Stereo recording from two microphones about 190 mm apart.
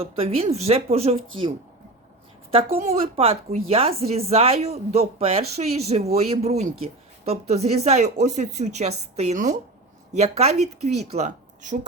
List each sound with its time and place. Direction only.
0.0 s speech: 30° right (ahead or behind)
2.9 s speech: 30° right (ahead or behind)